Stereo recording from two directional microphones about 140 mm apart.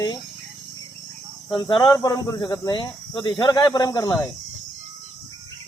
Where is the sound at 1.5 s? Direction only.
30° left (ahead or behind).